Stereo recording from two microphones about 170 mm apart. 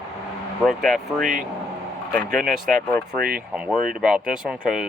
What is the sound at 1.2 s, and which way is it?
Speech, 50° right (ahead or behind).